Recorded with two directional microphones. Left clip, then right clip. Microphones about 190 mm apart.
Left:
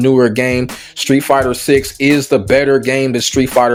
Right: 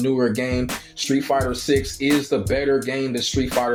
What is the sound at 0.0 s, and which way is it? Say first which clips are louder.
Speech: left 10 dB; 45° left (ahead or behind).